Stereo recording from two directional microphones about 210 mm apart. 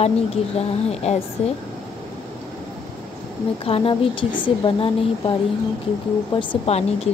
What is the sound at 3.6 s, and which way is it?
A woman's voice, 25° left (ahead or behind).